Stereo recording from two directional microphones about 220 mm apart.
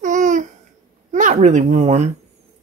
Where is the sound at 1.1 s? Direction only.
35° right (ahead or behind).